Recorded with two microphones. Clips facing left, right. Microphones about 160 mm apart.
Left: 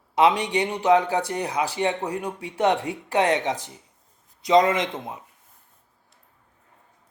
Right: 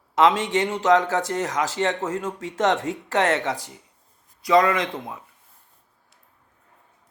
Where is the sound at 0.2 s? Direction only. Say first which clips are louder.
Right 1 dB; 15° left (ahead or behind).